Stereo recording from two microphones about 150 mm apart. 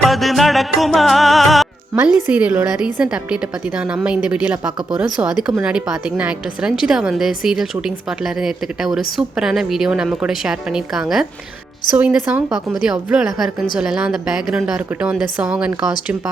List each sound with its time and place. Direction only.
0.0 s music: centre (ahead or behind)
2.3 s a woman's voice: 10° right (ahead or behind)